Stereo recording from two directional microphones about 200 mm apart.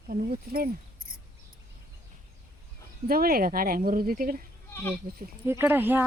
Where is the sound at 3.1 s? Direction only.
45° right (ahead or behind).